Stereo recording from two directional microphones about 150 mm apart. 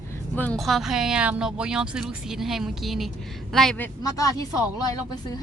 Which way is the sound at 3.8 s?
20° left (ahead or behind).